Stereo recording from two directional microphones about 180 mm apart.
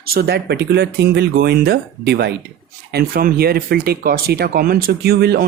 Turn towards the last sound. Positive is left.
turn(degrees=-60)  # may be behind; listen again after turning